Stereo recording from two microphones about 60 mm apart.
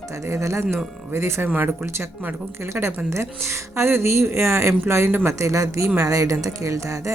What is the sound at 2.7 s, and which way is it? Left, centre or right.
A woman's voice, right.